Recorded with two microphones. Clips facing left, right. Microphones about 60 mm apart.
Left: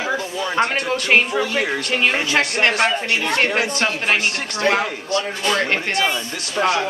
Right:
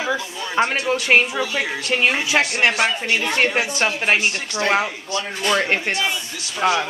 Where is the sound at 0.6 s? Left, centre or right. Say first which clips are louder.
Right 1 dB; centre.